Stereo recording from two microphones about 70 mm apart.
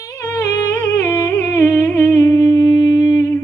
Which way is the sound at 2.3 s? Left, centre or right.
Left.